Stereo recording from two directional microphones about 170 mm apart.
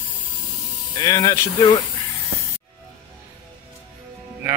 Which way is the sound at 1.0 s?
20° left (ahead or behind).